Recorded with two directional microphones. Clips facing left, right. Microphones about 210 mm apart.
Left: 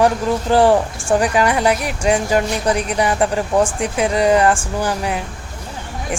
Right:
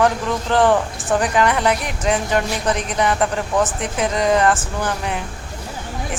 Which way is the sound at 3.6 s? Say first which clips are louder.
Left 3 dB; 10° left (ahead or behind).